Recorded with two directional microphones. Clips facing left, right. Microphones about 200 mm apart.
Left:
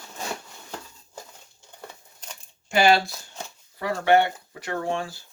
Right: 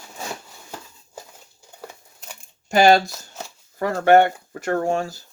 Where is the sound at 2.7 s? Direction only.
45° right (ahead or behind).